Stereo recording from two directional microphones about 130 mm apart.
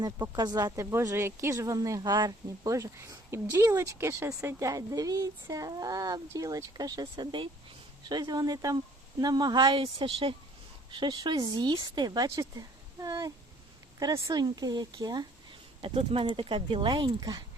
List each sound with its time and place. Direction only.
0.2 s speech: 30° right (ahead or behind)
9.8 s a woman's voice: 45° right (ahead or behind); by 15.3 s 30° right (ahead or behind)
15.8 s speech: 45° right (ahead or behind)